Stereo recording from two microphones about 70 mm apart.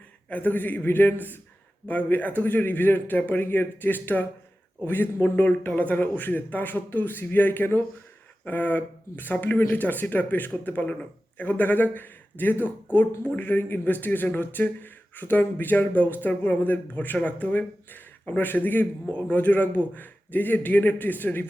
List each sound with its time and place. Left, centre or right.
0.3 s speech: left